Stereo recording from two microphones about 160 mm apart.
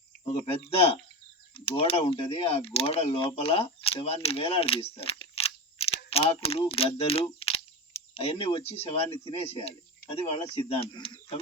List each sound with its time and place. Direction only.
0.3 s speech: 35° left (ahead or behind)